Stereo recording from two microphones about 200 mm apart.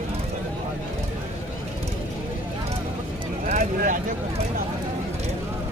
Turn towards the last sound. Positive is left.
turn(degrees=-40)  # may be behind; listen again after turning